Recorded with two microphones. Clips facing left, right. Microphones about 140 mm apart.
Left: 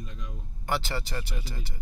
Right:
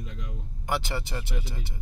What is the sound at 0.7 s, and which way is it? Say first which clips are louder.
Speech: even; 15° right (ahead or behind).